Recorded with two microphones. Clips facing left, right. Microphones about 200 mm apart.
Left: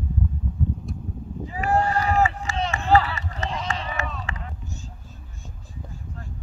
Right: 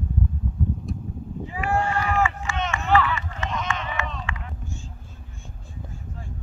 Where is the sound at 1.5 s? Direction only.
40° left (ahead or behind).